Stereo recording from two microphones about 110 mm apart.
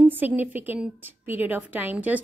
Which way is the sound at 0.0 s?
15° right (ahead or behind).